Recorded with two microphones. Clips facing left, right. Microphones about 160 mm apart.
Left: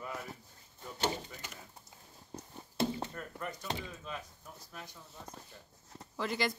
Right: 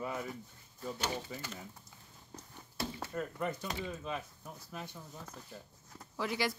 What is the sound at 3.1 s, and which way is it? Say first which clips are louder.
Speech: right 6 dB; 25° right (ahead or behind).